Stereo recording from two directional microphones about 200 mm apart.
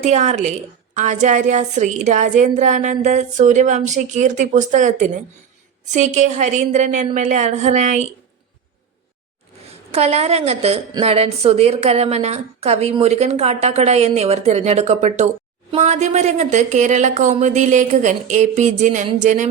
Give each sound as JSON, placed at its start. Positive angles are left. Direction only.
{"t": 0.0, "sound": "a woman's voice", "side_deg": -35}
{"t": 9.6, "sound": "a woman's voice", "side_deg": -30}